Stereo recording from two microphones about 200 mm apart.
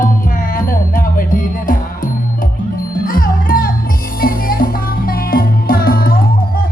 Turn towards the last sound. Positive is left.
turn(degrees=50)  # may be behind; listen again after turning